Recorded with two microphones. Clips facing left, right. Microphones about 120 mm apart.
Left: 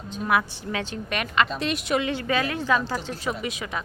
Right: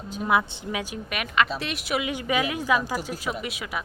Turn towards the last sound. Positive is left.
turn(degrees=-5)  # may be behind; listen again after turning